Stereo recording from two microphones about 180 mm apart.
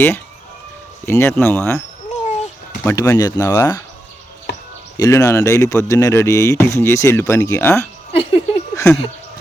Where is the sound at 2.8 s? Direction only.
15° left (ahead or behind).